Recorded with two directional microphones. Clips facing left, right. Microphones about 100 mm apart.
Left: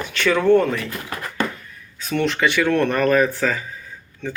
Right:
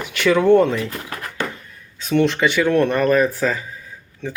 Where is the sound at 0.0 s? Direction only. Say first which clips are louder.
Right 2 dB; 15° right (ahead or behind).